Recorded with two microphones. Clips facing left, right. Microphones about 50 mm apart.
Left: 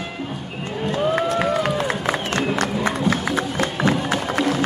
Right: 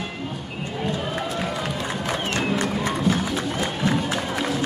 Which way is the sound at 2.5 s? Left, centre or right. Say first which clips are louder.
Left 2 dB; left.